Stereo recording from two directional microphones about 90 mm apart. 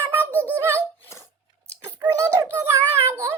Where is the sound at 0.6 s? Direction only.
30° right (ahead or behind).